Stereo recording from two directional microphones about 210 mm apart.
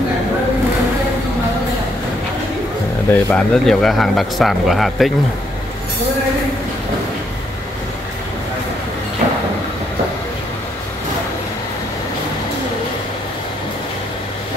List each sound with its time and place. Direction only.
3.1 s speech: 5° left (ahead or behind)